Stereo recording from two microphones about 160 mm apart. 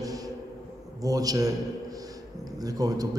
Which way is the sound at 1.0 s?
20° right (ahead or behind).